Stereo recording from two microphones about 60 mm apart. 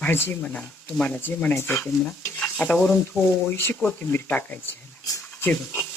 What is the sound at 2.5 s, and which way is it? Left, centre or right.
Stir, left.